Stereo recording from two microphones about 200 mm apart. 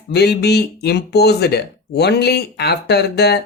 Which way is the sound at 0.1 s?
55° left (ahead or behind).